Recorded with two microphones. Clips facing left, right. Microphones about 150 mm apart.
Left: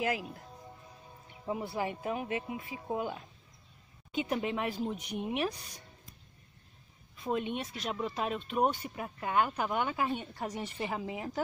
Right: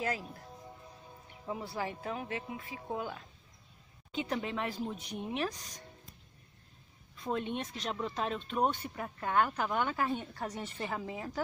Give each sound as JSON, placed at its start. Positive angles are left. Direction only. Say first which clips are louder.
{"t": 0.0, "sound": "speech", "louder": "left 3 dB", "side_deg": 15}
{"t": 1.4, "sound": "speech", "louder": "left 3 dB", "side_deg": 15}
{"t": 7.2, "sound": "speech", "louder": "left 2 dB", "side_deg": 10}